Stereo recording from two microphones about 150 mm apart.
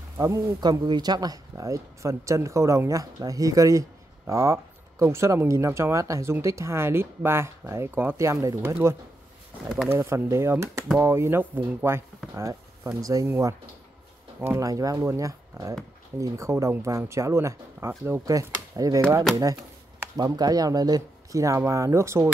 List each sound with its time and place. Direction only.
0.2 s speech: 25° right (ahead or behind)
9.7 s speech: 5° right (ahead or behind)
9.9 s speech: 15° right (ahead or behind)
20.2 s speech: 25° right (ahead or behind)